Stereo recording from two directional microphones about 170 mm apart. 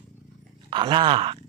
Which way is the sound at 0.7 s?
30° right (ahead or behind).